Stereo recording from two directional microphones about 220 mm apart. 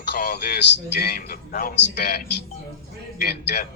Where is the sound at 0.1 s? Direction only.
45° left (ahead or behind).